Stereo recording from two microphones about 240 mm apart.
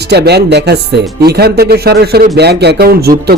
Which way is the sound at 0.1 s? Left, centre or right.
Right.